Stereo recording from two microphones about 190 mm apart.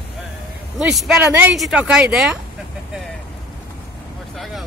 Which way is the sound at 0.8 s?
Centre (ahead or behind).